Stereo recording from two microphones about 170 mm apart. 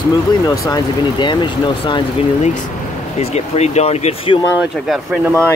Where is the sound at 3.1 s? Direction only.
40° left (ahead or behind).